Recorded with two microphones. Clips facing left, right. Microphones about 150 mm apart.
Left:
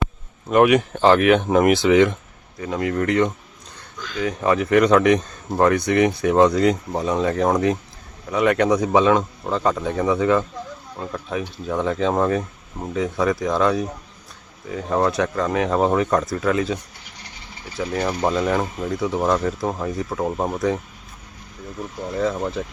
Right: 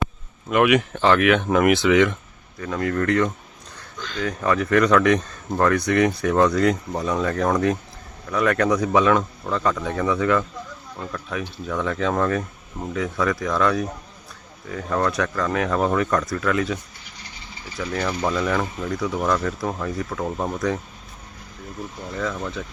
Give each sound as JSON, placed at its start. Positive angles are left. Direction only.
{"t": 0.5, "sound": "speech", "side_deg": 35}
{"t": 2.6, "sound": "speech", "side_deg": 20}
{"t": 4.0, "sound": "speech", "side_deg": 10}
{"t": 4.4, "sound": "speech", "side_deg": 20}
{"t": 17.7, "sound": "speech", "side_deg": 25}
{"t": 22.1, "sound": "speech", "side_deg": 35}